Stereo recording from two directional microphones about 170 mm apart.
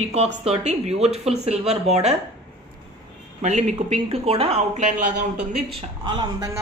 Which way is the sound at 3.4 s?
40° right (ahead or behind).